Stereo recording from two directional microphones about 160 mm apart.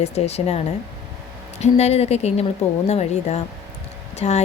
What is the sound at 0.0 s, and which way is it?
A woman's voice, 40° left (ahead or behind).